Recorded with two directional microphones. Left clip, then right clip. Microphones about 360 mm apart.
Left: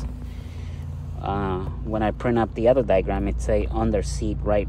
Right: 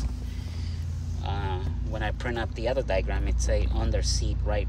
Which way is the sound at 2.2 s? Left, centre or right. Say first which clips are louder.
Left 9 dB; centre.